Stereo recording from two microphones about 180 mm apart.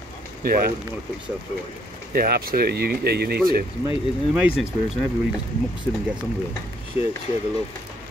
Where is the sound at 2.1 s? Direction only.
55° right (ahead or behind).